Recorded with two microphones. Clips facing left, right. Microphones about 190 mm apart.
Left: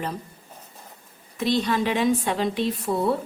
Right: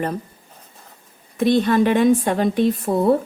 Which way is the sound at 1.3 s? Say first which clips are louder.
Right 7 dB; 55° right (ahead or behind).